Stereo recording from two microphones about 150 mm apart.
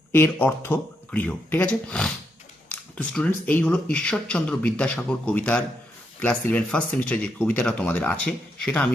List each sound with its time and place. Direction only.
0.1 s speech: 10° left (ahead or behind)